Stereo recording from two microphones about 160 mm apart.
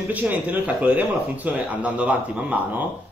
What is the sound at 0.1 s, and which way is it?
Speech, 10° right (ahead or behind).